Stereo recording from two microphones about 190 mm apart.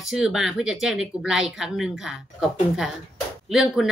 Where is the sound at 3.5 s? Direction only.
Centre (ahead or behind).